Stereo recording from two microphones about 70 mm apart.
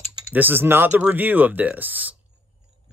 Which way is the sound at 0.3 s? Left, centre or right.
Right.